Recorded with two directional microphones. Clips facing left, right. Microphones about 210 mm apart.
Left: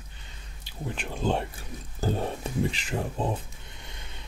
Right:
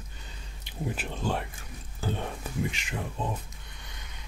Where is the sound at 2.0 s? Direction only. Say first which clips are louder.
Left 5 dB; 35° left (ahead or behind).